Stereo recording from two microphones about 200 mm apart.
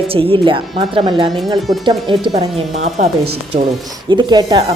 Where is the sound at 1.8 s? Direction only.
25° right (ahead or behind).